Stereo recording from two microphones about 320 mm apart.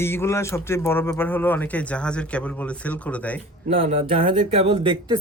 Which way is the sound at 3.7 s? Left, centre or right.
Centre.